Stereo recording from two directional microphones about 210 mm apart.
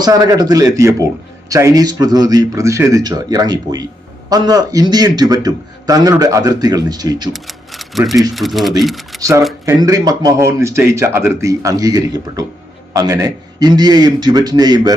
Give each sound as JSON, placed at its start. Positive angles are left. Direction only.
{"t": 0.0, "sound": "a man's voice", "side_deg": -15}
{"t": 7.3, "sound": "typewriter", "side_deg": 0}
{"t": 8.4, "sound": "speech", "side_deg": 0}
{"t": 9.6, "sound": "a man's voice", "side_deg": -15}